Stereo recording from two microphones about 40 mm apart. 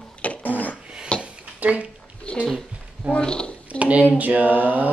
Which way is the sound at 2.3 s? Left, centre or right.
Left.